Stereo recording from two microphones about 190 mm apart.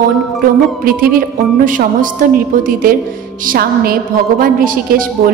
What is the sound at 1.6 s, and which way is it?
A woman's voice, 45° right (ahead or behind).